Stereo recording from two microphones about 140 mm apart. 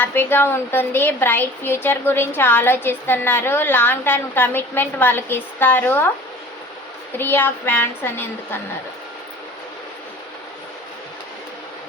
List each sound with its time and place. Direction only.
0.0 s a woman's voice: 15° left (ahead or behind)
7.2 s a woman's voice: 15° left (ahead or behind)